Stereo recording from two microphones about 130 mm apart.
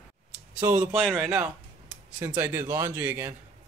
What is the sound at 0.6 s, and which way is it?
Speech, 15° right (ahead or behind).